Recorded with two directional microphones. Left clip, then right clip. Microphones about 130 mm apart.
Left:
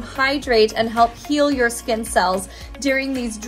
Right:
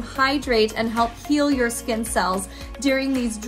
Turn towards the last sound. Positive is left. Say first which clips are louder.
# left 2 dB
turn(degrees=-25)  # may be behind; listen again after turning